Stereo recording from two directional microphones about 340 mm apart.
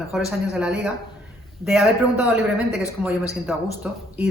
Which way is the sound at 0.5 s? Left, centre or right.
Centre.